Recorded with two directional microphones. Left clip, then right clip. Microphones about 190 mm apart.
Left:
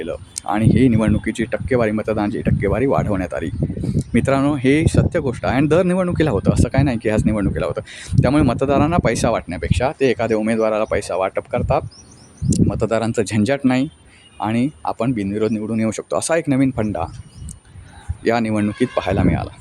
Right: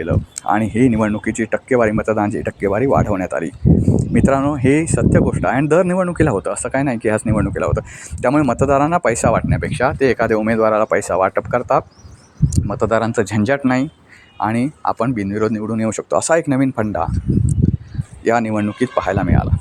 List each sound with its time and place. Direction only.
0.0 s speech: 5° left (ahead or behind)
5.6 s speech: 25° left (ahead or behind); by 17.1 s 5° left (ahead or behind)
18.3 s speech: 5° left (ahead or behind)